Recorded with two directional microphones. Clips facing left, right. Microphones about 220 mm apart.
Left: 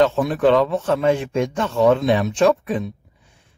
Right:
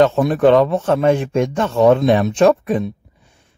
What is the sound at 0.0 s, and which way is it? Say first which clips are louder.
Speech: right 3 dB; 45° right (ahead or behind).